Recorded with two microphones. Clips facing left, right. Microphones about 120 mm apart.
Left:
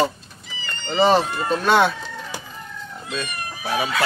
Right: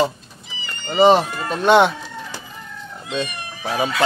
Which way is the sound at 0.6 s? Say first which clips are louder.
Right 4 dB; 10° right (ahead or behind).